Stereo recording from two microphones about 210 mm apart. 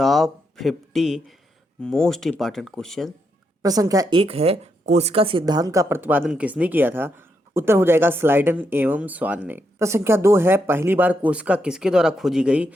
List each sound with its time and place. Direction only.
0.0 s speech: centre (ahead or behind)
3.6 s a woman's voice: 15° right (ahead or behind)